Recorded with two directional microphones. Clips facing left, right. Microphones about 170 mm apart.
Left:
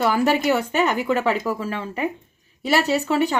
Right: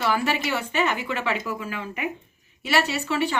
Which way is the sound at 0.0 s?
45° left (ahead or behind).